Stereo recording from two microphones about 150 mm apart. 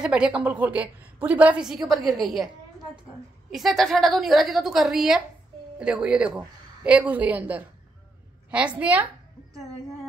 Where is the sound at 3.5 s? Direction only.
Centre (ahead or behind).